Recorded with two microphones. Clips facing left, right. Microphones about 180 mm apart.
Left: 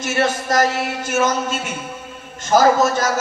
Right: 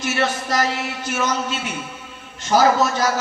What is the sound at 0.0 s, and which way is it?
Speech, 45° left (ahead or behind).